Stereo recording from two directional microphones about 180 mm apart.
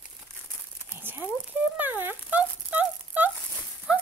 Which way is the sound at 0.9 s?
10° right (ahead or behind).